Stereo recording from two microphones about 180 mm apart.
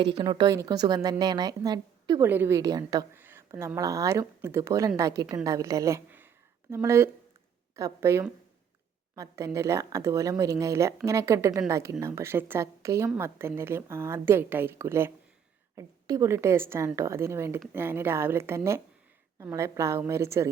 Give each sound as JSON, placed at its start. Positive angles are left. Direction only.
{"t": 0.2, "sound": "a woman's voice", "side_deg": -25}
{"t": 2.2, "sound": "a woman's voice", "side_deg": -10}